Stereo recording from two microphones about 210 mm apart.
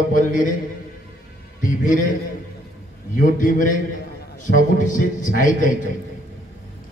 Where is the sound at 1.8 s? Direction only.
40° left (ahead or behind).